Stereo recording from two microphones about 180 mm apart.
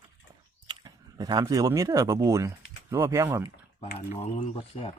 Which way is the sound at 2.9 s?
15° right (ahead or behind).